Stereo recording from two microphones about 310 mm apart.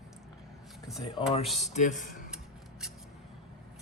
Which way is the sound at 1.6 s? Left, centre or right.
Left.